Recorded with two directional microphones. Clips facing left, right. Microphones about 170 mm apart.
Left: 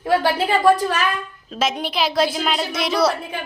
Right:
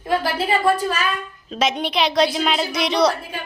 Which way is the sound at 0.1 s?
70° left (ahead or behind).